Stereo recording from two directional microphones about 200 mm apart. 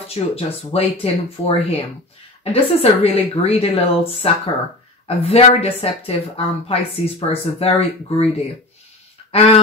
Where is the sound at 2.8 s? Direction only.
30° left (ahead or behind).